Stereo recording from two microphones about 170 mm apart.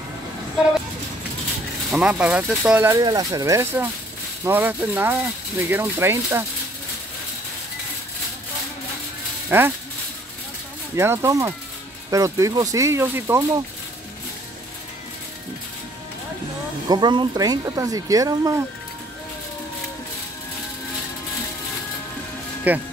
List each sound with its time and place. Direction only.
1.9 s speech: 5° right (ahead or behind)
9.5 s speech: 10° right (ahead or behind)
11.0 s speech: 15° right (ahead or behind)
16.9 s speech: 25° right (ahead or behind)
22.7 s speech: 10° right (ahead or behind)